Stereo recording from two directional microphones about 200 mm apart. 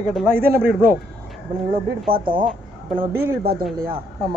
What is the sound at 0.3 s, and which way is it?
Speech, 50° right (ahead or behind).